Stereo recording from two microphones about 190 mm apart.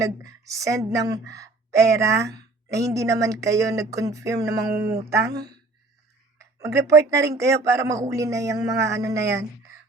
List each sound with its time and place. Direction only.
0.0 s a woman's voice: 15° right (ahead or behind)
5.2 s a woman's voice: 60° right (ahead or behind)
6.4 s speech: 15° right (ahead or behind)